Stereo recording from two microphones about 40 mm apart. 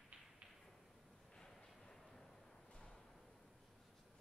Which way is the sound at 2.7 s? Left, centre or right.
Left.